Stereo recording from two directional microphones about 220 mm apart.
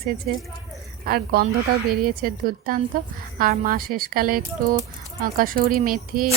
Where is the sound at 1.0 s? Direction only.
40° right (ahead or behind).